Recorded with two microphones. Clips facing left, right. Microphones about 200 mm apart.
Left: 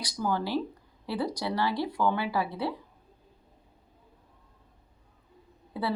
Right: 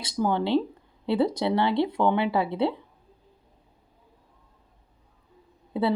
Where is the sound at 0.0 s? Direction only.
25° right (ahead or behind).